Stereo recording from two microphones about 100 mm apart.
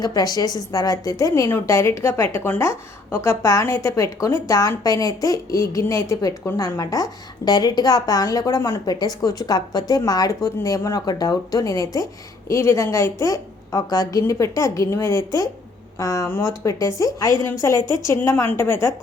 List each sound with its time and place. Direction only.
0.0 s a woman's voice: 40° left (ahead or behind)
8.9 s a woman's voice: 40° left (ahead or behind); by 18.9 s 25° left (ahead or behind)